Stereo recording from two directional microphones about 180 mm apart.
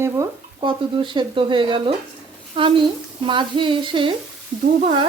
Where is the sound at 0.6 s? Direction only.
25° right (ahead or behind).